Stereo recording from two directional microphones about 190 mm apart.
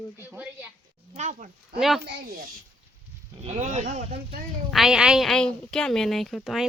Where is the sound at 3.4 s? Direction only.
35° right (ahead or behind).